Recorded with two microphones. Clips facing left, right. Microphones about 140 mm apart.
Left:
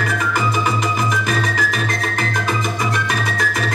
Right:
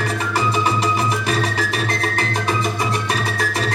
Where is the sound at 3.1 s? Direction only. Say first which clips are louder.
Even; 35° right (ahead or behind).